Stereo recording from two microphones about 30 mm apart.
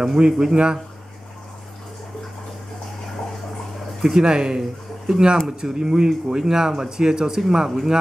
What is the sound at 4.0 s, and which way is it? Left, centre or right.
Speech, centre.